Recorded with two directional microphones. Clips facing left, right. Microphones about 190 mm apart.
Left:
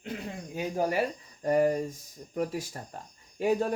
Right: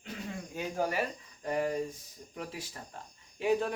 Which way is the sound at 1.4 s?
45° left (ahead or behind).